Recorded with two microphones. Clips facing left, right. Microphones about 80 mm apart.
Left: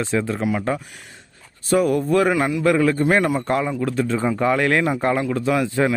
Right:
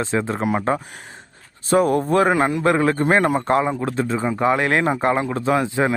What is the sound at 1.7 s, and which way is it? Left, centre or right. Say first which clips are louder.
Speech: right 1 dB; right.